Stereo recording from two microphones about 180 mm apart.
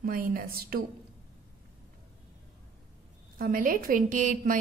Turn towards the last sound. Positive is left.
turn(degrees=-50)  # may be behind; listen again after turning